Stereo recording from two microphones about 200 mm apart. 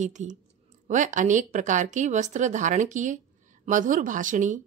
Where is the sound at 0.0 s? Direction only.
35° right (ahead or behind).